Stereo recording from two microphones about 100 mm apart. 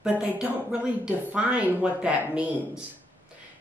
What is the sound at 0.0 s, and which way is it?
A woman's voice, 5° right (ahead or behind).